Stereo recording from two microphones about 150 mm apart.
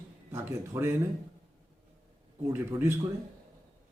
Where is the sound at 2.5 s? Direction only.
15° right (ahead or behind).